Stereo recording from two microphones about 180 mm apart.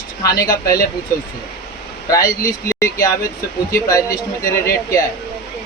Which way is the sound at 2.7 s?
15° left (ahead or behind).